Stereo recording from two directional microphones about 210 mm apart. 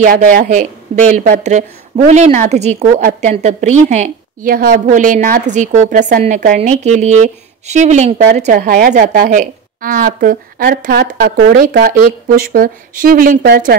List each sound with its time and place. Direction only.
0.0 s a woman's voice: 45° right (ahead or behind)
8.5 s a woman's voice: 45° right (ahead or behind)